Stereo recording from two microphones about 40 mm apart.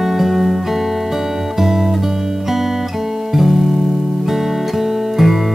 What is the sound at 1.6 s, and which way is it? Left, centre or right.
Music, centre.